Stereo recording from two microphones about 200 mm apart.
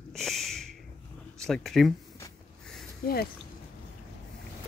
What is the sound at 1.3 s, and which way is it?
Speech, centre (ahead or behind).